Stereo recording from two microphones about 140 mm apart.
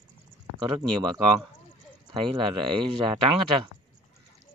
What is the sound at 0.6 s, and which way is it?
Speech, 30° right (ahead or behind).